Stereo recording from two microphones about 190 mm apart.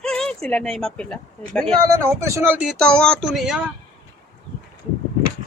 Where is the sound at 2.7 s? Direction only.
5° left (ahead or behind).